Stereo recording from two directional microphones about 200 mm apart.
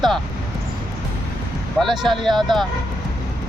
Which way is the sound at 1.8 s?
Centre (ahead or behind).